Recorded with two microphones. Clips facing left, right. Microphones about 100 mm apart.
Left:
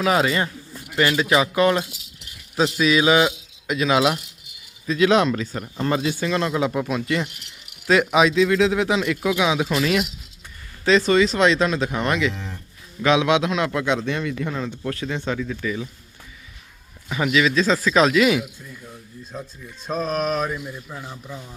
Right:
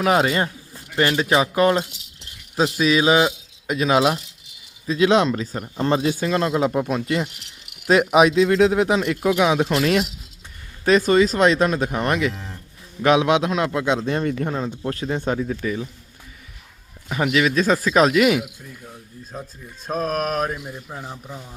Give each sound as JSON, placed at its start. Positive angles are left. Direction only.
{"t": 0.0, "sound": "speech", "side_deg": -40}
{"t": 2.8, "sound": "speech", "side_deg": -35}
{"t": 7.9, "sound": "speech", "side_deg": -45}
{"t": 9.4, "sound": "speech", "side_deg": -50}
{"t": 9.6, "sound": "speech", "side_deg": -35}
{"t": 10.8, "sound": "speech", "side_deg": -45}
{"t": 12.3, "sound": "speech", "side_deg": -5}
{"t": 13.0, "sound": "speech", "side_deg": -35}
{"t": 14.8, "sound": "speech", "side_deg": -30}
{"t": 17.1, "sound": "speech", "side_deg": -40}
{"t": 18.3, "sound": "speech", "side_deg": -15}
{"t": 20.0, "sound": "speech", "side_deg": -50}
{"t": 20.7, "sound": "speech", "side_deg": -35}
{"t": 21.2, "sound": "speech", "side_deg": -10}